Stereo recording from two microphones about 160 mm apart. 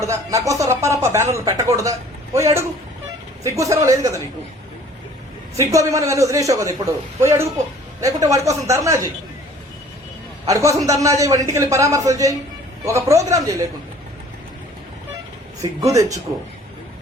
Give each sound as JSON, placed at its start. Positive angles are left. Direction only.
{"t": 0.0, "sound": "speech", "side_deg": -20}
{"t": 5.5, "sound": "speech", "side_deg": -20}
{"t": 10.4, "sound": "speech", "side_deg": -20}
{"t": 15.8, "sound": "speech", "side_deg": -20}